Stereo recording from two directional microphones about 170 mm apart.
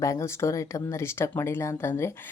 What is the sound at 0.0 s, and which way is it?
Speech, 15° left (ahead or behind).